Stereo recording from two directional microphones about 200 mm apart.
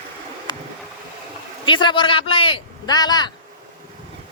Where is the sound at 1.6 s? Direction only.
25° left (ahead or behind).